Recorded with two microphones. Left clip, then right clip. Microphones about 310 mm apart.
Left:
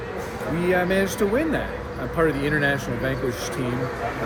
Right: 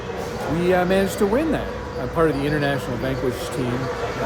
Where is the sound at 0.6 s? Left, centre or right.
Centre.